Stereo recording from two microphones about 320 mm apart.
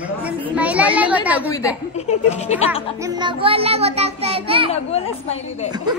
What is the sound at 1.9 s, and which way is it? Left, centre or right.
Speech, centre.